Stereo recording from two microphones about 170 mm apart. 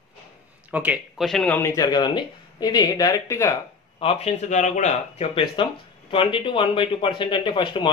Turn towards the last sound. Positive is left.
turn(degrees=30)  # may be behind; listen again after turning